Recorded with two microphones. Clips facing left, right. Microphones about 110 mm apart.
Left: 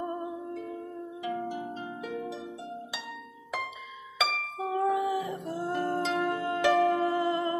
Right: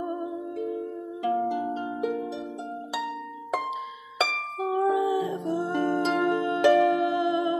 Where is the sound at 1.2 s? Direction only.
35° right (ahead or behind).